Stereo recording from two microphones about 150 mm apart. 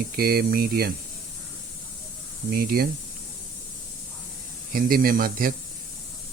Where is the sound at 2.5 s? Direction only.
75° right (ahead or behind).